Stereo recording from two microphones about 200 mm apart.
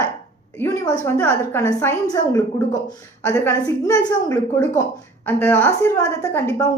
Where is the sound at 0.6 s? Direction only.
15° left (ahead or behind).